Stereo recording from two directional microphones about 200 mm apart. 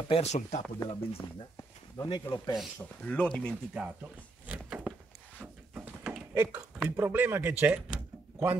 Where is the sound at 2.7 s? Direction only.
5° left (ahead or behind).